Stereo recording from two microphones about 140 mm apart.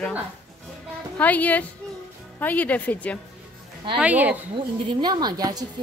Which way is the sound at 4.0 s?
10° right (ahead or behind).